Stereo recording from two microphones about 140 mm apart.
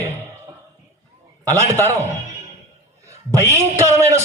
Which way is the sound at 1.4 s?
20° right (ahead or behind).